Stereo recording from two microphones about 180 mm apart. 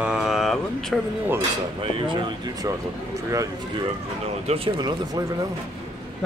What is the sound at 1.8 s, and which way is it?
Speech, 30° right (ahead or behind).